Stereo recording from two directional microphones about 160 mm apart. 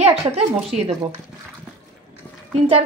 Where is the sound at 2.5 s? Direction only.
40° right (ahead or behind).